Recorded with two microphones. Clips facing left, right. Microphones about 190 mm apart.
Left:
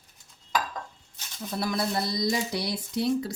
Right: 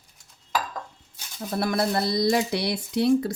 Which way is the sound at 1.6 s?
60° right (ahead or behind).